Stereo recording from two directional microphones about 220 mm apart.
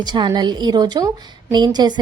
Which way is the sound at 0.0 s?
20° right (ahead or behind).